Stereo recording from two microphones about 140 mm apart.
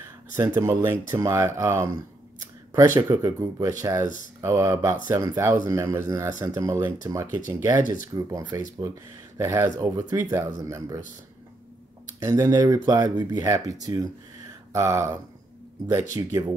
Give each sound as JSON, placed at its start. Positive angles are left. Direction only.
{"t": 0.4, "sound": "speech", "side_deg": -20}
{"t": 3.1, "sound": "speech", "side_deg": -25}
{"t": 7.8, "sound": "speech", "side_deg": 70}
{"t": 8.1, "sound": "speech", "side_deg": -20}
{"t": 12.2, "sound": "speech", "side_deg": -25}
{"t": 16.2, "sound": "speech", "side_deg": -20}